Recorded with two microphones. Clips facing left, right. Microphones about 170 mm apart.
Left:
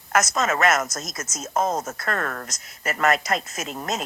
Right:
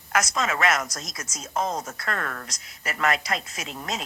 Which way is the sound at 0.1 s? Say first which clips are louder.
Left 3 dB; 45° left (ahead or behind).